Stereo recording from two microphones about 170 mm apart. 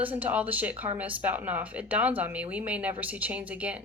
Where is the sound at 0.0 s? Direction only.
10° right (ahead or behind).